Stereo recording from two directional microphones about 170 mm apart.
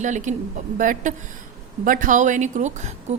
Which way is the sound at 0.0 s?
45° right (ahead or behind).